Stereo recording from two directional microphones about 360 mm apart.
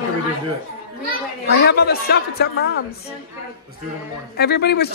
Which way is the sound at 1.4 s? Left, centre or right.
Left.